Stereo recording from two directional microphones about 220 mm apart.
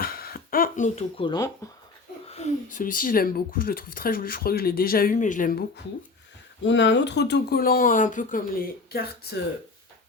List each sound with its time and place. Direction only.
0.0 s a sound: 40° left (ahead or behind); by 1.5 s 20° left (ahead or behind)
2.2 s speech: 30° left (ahead or behind)
6.7 s speech: 55° left (ahead or behind)